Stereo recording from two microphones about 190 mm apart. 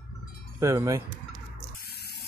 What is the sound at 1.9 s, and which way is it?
Spray, 55° left (ahead or behind).